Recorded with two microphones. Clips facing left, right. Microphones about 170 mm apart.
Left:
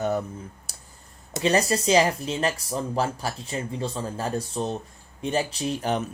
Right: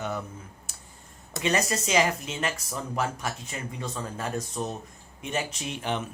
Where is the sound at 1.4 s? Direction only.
35° left (ahead or behind).